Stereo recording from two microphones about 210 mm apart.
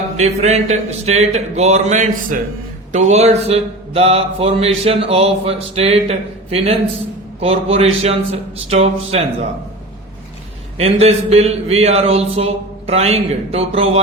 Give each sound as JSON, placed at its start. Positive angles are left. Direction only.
{"t": 0.2, "sound": "speech", "side_deg": -30}
{"t": 2.9, "sound": "mantra", "side_deg": -30}
{"t": 10.8, "sound": "mantra", "side_deg": -30}